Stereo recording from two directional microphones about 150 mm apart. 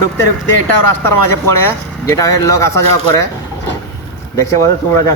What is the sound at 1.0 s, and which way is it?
Speech, 15° left (ahead or behind).